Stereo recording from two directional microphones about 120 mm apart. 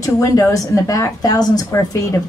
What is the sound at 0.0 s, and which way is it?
A woman's voice, 30° left (ahead or behind).